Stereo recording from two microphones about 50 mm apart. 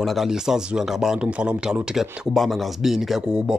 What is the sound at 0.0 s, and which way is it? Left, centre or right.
Speech, centre.